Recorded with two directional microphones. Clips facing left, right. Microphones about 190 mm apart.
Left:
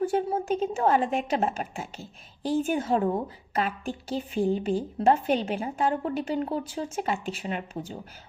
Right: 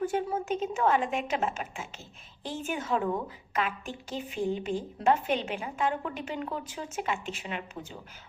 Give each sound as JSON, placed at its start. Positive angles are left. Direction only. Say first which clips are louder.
{"t": 0.0, "sound": "a woman's voice", "louder": "left 4 dB", "side_deg": 35}